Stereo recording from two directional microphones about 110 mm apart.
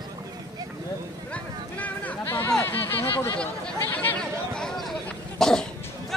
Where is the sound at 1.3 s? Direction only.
15° left (ahead or behind).